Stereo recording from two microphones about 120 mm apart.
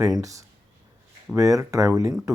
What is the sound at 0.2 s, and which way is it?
Speech, 25° right (ahead or behind).